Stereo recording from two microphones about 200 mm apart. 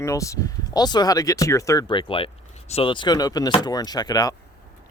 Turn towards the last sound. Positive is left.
turn(degrees=20)  # may be behind; listen again after turning